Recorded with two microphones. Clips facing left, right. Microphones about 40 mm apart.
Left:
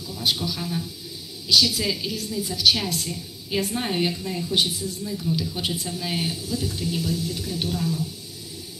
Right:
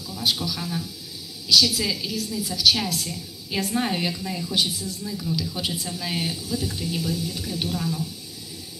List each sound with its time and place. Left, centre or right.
0.1 s a woman's voice: centre